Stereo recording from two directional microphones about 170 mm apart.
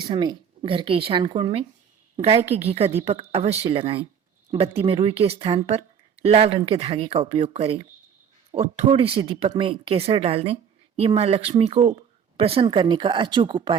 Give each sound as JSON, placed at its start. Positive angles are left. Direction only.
{"t": 0.0, "sound": "speech", "side_deg": -25}